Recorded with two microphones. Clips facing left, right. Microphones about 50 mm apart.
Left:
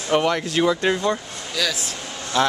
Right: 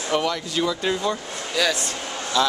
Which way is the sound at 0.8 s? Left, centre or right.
Left.